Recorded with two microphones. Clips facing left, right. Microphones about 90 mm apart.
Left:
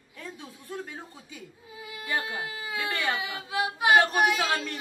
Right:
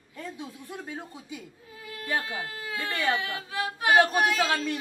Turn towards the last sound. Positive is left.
turn(degrees=10)  # may be behind; listen again after turning